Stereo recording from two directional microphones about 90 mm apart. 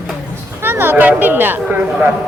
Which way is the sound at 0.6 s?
25° right (ahead or behind).